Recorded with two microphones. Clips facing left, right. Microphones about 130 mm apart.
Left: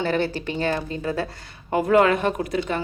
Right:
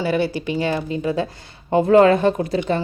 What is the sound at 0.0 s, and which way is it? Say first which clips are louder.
A woman's voice: right 3 dB; 10° right (ahead or behind).